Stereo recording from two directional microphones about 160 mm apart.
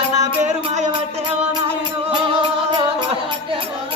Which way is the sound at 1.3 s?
40° right (ahead or behind).